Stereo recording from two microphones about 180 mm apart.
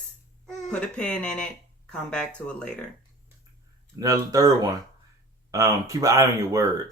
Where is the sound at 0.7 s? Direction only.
5° left (ahead or behind).